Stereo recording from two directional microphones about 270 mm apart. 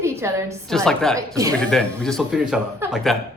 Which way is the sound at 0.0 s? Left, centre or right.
Centre.